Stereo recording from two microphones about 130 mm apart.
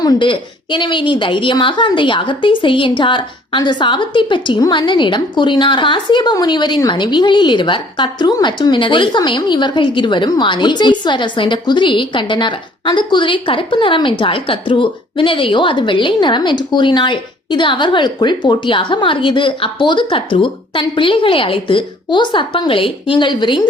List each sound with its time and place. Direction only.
0.0 s a woman's voice: 35° left (ahead or behind)